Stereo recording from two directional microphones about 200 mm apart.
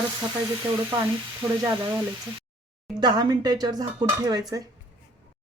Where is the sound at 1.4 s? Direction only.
15° right (ahead or behind).